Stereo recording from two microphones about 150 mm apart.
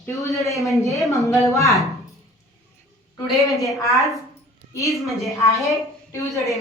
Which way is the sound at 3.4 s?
20° left (ahead or behind).